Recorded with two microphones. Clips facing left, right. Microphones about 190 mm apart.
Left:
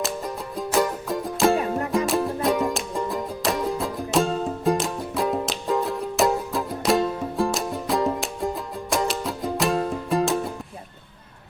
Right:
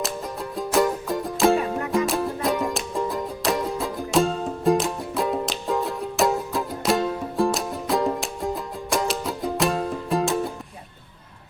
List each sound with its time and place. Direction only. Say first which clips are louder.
0.5 s music: right 2 dB; centre (ahead or behind)